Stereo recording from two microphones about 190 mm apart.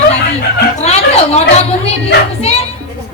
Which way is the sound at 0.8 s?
35° left (ahead or behind).